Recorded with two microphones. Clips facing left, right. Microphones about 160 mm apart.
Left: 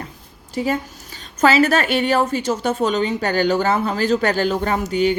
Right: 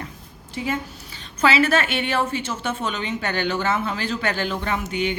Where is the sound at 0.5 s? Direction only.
35° left (ahead or behind).